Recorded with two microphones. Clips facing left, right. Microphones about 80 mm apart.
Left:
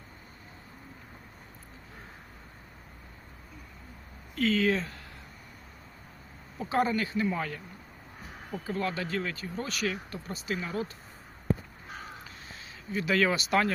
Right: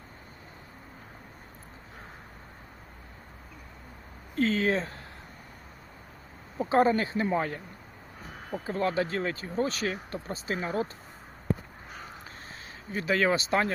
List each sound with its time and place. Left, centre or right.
4.4 s speech: right
6.6 s speech: right
8.6 s speech: right
12.9 s speech: right